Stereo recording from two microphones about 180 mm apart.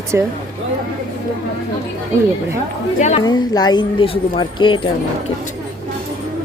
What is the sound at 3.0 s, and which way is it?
Speech, 40° left (ahead or behind).